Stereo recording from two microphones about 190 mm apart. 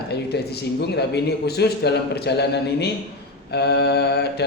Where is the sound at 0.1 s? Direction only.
60° left (ahead or behind).